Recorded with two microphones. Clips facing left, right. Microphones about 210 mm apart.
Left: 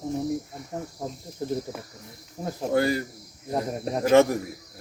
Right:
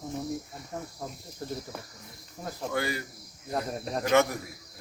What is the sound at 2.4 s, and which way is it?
Speech, 35° left (ahead or behind).